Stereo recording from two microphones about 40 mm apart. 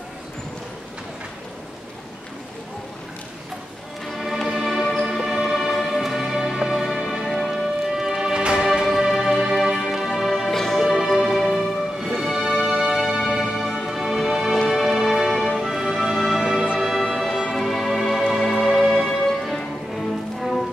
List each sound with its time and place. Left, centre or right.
4.6 s music: centre
5.0 s music: centre
8.3 s music: right
8.8 s music: centre
10.5 s music: centre
11.1 s music: centre
13.8 s music: centre
16.8 s music: centre